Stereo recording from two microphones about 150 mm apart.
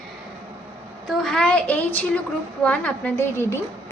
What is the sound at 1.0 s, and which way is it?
A woman's voice, 5° left (ahead or behind).